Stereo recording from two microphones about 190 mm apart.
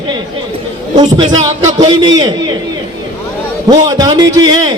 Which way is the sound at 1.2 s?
20° right (ahead or behind).